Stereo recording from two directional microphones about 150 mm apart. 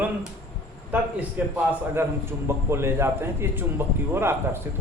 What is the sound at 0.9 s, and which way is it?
Speech, 10° right (ahead or behind).